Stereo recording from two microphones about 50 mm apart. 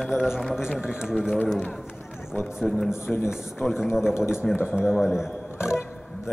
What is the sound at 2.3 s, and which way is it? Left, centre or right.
Speech, left.